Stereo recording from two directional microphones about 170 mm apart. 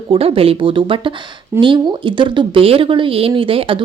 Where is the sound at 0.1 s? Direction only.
35° right (ahead or behind).